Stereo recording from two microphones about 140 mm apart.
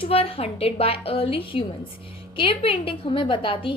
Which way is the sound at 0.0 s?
45° left (ahead or behind).